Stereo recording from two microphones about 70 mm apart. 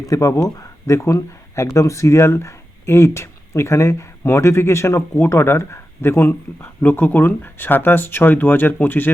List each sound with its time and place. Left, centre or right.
0.0 s speech: left